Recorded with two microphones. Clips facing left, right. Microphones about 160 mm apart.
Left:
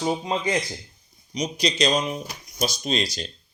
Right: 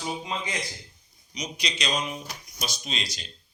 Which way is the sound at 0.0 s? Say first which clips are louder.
Left 8 dB; 35° left (ahead or behind).